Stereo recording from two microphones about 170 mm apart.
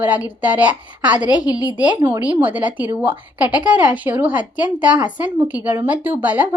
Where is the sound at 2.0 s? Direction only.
10° right (ahead or behind).